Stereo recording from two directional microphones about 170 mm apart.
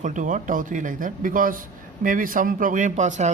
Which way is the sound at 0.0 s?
50° right (ahead or behind).